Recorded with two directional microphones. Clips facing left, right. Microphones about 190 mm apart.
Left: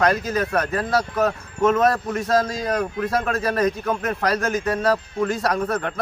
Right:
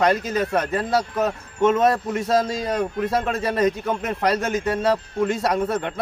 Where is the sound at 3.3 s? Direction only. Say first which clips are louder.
Left 1 dB; 20° right (ahead or behind).